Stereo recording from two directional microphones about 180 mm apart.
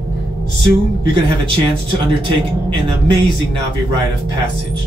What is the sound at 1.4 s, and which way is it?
Speech, 30° right (ahead or behind).